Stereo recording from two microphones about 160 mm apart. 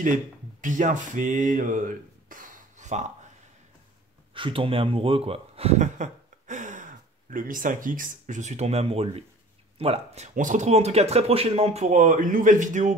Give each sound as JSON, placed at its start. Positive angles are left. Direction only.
{"t": 0.0, "sound": "speech", "side_deg": -55}
{"t": 4.3, "sound": "speech", "side_deg": -35}